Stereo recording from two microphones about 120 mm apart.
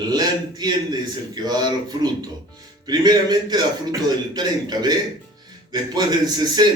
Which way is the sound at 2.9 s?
35° right (ahead or behind).